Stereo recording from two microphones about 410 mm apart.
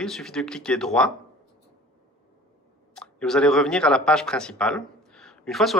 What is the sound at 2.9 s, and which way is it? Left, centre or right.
Speech, centre.